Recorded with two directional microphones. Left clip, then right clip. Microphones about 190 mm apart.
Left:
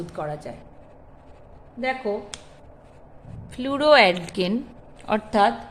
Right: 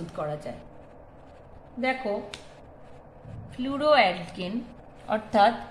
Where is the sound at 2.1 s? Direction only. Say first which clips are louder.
Left 3 dB; centre (ahead or behind).